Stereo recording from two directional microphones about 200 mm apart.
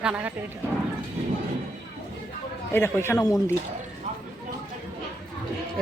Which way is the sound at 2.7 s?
10° left (ahead or behind).